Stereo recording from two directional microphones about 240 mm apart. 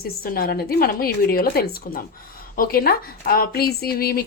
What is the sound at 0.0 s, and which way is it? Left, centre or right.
Speech, left.